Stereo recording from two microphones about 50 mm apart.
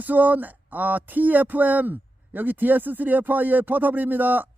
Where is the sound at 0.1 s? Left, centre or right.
Right.